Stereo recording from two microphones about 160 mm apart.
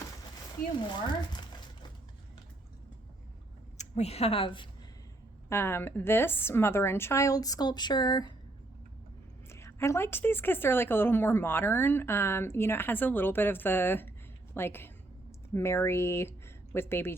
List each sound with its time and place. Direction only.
0.9 s a sound: 25° left (ahead or behind)
3.8 s a woman's voice: 45° left (ahead or behind)
5.5 s a woman's voice: 15° left (ahead or behind)
9.5 s a woman's voice: 15° left (ahead or behind)